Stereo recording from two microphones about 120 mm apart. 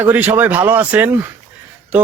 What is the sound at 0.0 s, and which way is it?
Speech, 15° right (ahead or behind).